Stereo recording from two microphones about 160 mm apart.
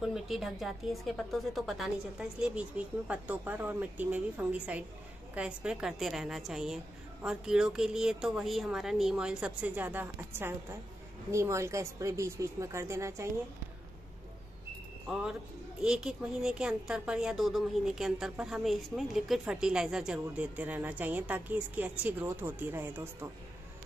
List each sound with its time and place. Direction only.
0.0 s a woman's voice: centre (ahead or behind); by 13.3 s 15° right (ahead or behind)
15.0 s a woman's voice: 5° right (ahead or behind)